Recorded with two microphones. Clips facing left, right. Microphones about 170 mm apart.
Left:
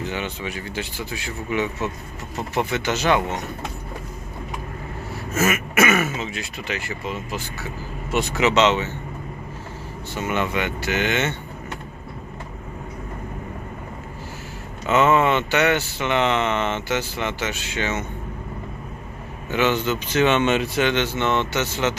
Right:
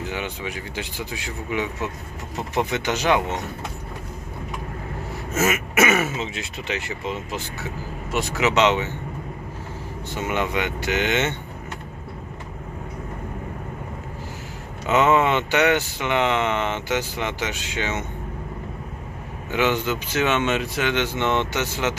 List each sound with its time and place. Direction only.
0.0 s speech: 10° right (ahead or behind)
5.3 s speech: 20° right (ahead or behind)
8.1 s speech: centre (ahead or behind)
10.2 s speech: 15° right (ahead or behind)
14.8 s speech: 15° right (ahead or behind)
19.5 s speech: 15° right (ahead or behind)
20.9 s speech: 15° right (ahead or behind)